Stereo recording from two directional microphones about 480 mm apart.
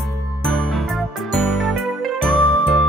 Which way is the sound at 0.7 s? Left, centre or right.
Centre.